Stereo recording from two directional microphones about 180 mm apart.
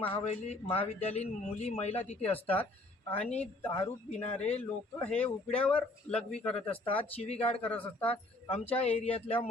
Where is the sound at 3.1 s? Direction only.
35° left (ahead or behind).